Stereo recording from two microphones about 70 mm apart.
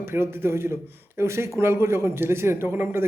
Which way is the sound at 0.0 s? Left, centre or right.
Right.